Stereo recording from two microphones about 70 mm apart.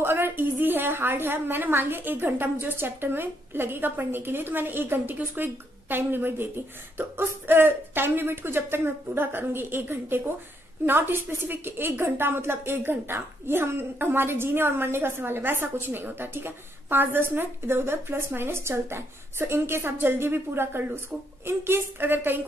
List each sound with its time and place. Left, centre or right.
0.0 s a woman's voice: right